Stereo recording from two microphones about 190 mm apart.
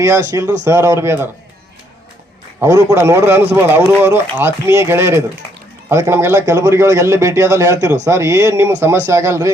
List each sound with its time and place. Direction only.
0.0 s a man's voice: 15° right (ahead or behind)
2.6 s a man's voice: 15° right (ahead or behind)